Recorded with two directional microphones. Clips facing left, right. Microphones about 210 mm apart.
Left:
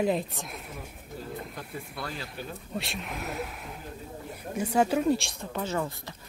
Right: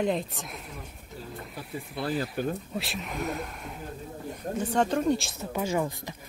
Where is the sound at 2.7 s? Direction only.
Centre (ahead or behind).